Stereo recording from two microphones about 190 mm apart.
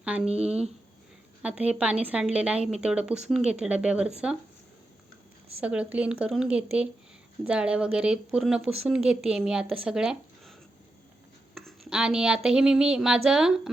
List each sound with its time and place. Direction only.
0.0 s speech: 5° right (ahead or behind)
0.3 s speech: 35° right (ahead or behind)
1.4 s speech: 5° right (ahead or behind)
5.5 s speech: 5° right (ahead or behind)
11.5 s a sound: centre (ahead or behind)